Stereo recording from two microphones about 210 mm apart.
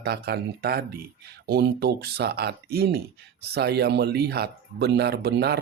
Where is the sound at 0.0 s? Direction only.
50° right (ahead or behind).